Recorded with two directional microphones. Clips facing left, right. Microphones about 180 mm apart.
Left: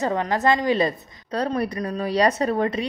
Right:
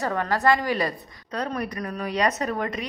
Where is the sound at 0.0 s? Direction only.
20° left (ahead or behind).